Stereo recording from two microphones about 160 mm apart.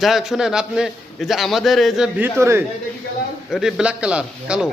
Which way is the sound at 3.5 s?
Centre (ahead or behind).